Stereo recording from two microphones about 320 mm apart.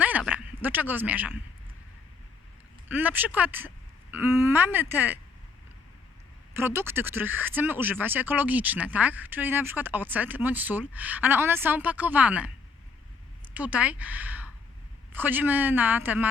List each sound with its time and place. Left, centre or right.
0.0 s speech: centre
2.9 s speech: centre
6.5 s speech: centre
13.5 s speech: centre